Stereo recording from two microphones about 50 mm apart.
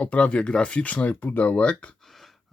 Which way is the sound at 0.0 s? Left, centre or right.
Left.